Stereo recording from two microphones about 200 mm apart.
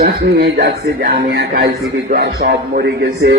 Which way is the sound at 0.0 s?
55° right (ahead or behind).